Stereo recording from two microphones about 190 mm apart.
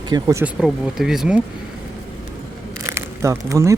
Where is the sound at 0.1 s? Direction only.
20° right (ahead or behind).